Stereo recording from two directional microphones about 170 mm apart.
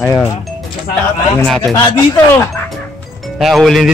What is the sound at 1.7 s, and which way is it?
Speech, 20° left (ahead or behind).